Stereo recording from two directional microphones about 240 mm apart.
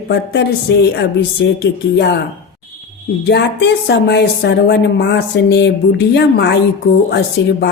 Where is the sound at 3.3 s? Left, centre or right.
Left.